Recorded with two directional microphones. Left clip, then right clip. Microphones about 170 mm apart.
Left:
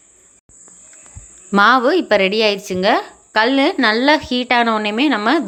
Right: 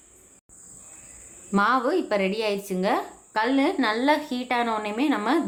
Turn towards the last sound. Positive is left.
turn(degrees=25)  # may be behind; listen again after turning